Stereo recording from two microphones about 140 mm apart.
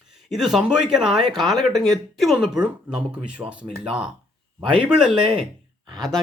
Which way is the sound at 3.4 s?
15° right (ahead or behind).